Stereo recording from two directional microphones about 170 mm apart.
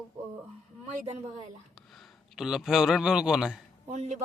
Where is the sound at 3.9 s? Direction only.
40° right (ahead or behind).